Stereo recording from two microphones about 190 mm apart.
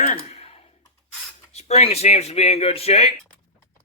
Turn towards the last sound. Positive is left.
turn(degrees=35)  # may be behind; listen again after turning